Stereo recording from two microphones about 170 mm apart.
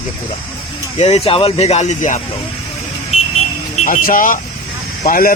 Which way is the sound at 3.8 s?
50° left (ahead or behind).